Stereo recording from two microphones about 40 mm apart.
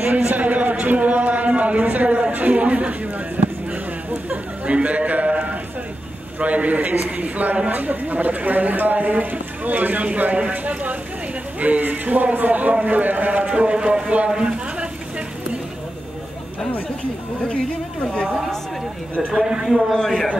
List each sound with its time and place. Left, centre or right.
0.3 s a sound: right
4.6 s a man's voice: right
14.3 s a sound: right
18.1 s a woman's voice: centre
19.3 s speech: right
19.9 s a woman's voice: centre